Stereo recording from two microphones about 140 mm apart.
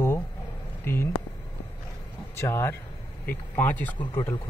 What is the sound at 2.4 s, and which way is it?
Speech, 20° left (ahead or behind).